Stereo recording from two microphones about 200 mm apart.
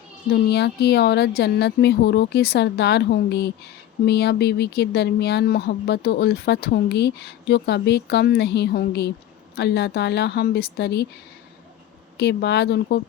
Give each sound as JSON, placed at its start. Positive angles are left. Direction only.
{"t": 0.3, "sound": "speech", "side_deg": 55}
{"t": 12.1, "sound": "speech", "side_deg": 55}